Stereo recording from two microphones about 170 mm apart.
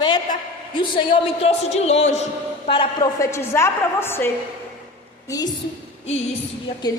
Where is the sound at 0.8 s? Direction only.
30° left (ahead or behind).